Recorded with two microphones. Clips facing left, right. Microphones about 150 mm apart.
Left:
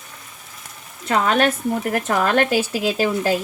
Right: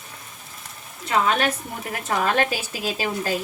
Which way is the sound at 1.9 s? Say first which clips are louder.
Left 2 dB; 80° left.